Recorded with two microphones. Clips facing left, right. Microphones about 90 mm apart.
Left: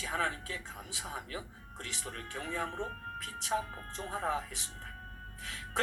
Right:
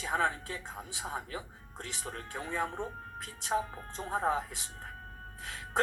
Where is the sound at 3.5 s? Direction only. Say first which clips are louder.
Right 2 dB; 20° right (ahead or behind).